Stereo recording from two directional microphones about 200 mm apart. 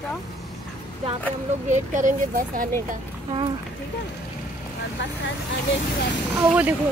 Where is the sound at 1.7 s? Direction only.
40° right (ahead or behind).